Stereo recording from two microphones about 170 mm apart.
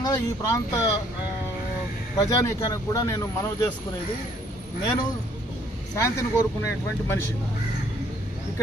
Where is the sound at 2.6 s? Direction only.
20° left (ahead or behind).